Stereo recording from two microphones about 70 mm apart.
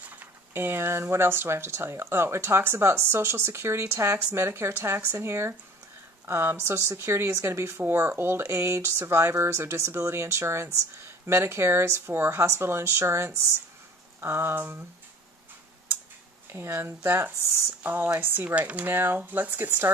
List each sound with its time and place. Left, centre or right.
0.0 s speech: right
16.4 s speech: right